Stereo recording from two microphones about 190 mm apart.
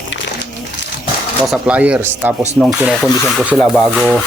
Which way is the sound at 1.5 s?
5° right (ahead or behind).